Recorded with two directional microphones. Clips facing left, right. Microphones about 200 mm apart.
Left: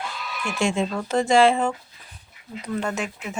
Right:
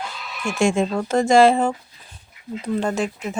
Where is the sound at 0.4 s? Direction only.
45° right (ahead or behind).